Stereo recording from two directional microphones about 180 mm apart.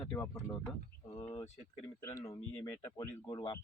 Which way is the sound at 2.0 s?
15° left (ahead or behind).